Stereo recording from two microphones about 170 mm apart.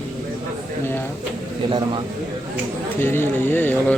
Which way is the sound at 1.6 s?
30° right (ahead or behind).